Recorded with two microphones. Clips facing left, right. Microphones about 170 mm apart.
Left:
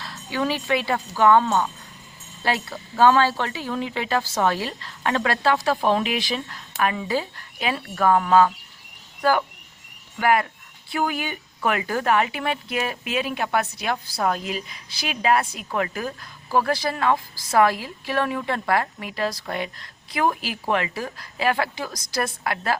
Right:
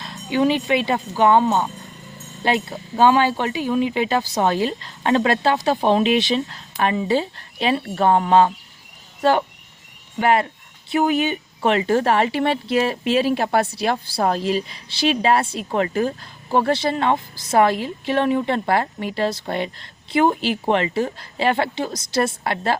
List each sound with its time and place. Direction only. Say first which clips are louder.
0.0 s speech: right 7 dB; 20° right (ahead or behind)